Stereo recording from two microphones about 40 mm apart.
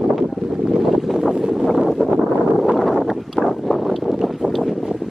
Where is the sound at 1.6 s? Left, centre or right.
Centre.